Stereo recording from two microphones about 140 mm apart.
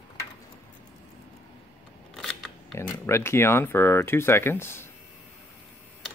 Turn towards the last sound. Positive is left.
turn(degrees=15)  # may be behind; listen again after turning